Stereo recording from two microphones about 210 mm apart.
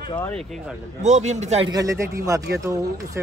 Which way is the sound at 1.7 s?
15° right (ahead or behind).